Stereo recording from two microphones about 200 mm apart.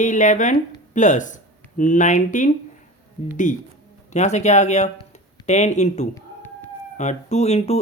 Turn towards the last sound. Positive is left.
turn(degrees=30)  # may be behind; listen again after turning